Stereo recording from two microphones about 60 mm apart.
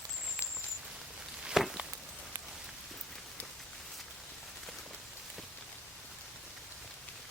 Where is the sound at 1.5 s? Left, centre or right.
Centre.